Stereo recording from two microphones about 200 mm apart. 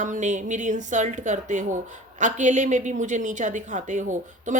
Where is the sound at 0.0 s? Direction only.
40° right (ahead or behind).